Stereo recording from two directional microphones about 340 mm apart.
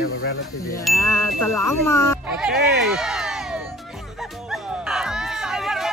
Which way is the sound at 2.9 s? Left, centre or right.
Centre.